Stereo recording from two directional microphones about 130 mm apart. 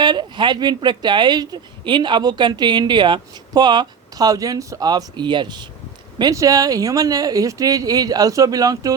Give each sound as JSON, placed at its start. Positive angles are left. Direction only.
{"t": 0.0, "sound": "speech", "side_deg": -35}